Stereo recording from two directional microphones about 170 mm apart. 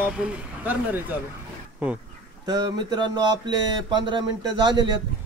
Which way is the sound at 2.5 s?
25° right (ahead or behind).